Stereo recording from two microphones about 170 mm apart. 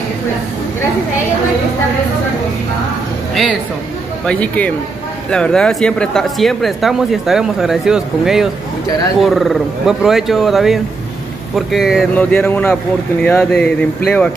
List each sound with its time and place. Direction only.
4.3 s speech: 10° left (ahead or behind)